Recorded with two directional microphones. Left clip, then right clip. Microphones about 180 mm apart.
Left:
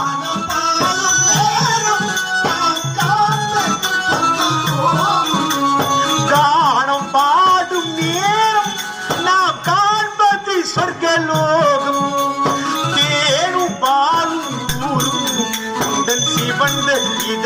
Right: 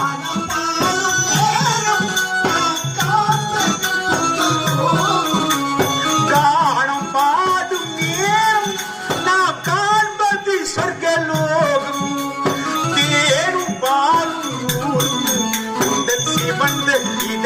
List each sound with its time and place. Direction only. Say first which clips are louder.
1.3 s music: left 1 dB; 35° right (ahead or behind)
5.6 s music: left 3 dB; 20° left (ahead or behind)
6.3 s music: left 3 dB; 35° right (ahead or behind)
8.2 s music: left 1 dB; 35° right (ahead or behind)
13.0 s music: even; 35° right (ahead or behind)